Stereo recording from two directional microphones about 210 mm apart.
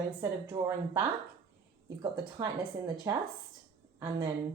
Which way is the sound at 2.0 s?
20° right (ahead or behind).